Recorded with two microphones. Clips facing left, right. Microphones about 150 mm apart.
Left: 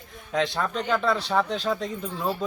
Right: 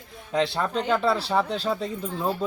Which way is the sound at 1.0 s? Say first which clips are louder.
Right 1 dB; 5° right (ahead or behind).